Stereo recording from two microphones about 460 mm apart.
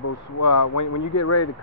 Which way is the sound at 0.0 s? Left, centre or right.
Left.